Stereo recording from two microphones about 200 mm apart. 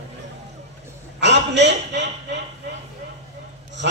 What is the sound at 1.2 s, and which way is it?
Speech, 60° right (ahead or behind).